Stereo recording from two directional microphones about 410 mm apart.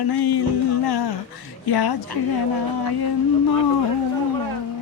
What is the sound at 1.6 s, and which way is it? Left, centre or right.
Speech, left.